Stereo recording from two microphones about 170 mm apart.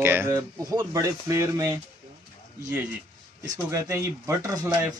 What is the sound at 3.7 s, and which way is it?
Speech, 15° right (ahead or behind).